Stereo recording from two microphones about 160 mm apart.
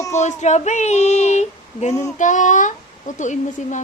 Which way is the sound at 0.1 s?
45° left (ahead or behind).